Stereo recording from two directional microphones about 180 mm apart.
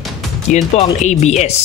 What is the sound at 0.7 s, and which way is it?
Speech, 40° left (ahead or behind).